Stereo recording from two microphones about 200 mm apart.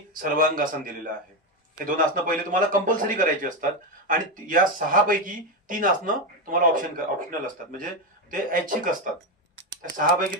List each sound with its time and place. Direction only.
0.2 s a man's voice: 45° right (ahead or behind)